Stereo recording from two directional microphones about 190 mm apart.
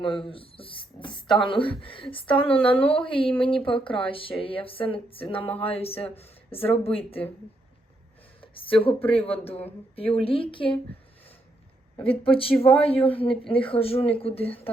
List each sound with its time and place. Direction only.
0.2 s speech: 30° left (ahead or behind)
8.4 s speech: 30° left (ahead or behind)
11.9 s speech: 30° left (ahead or behind)